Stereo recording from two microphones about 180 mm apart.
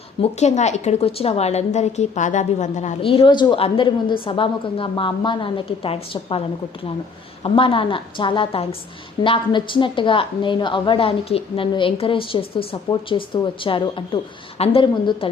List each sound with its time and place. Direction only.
0.2 s a woman's voice: 40° left (ahead or behind)
7.4 s a woman's voice: 30° left (ahead or behind)